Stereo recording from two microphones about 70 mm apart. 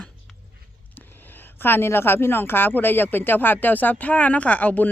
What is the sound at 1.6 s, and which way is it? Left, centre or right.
Speech, left.